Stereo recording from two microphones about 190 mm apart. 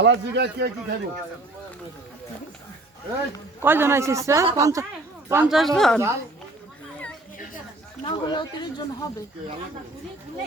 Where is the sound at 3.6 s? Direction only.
10° right (ahead or behind).